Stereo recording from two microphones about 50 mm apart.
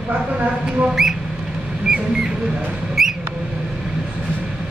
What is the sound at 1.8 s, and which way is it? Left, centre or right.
Rodents, centre.